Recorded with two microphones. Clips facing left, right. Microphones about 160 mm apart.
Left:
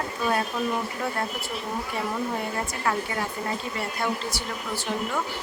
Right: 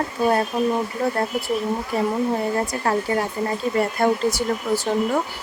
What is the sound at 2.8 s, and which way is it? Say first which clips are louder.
Speech: right 4 dB; 40° right (ahead or behind).